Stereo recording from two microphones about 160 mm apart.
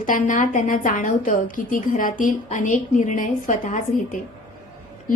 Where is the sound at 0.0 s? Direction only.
55° left (ahead or behind).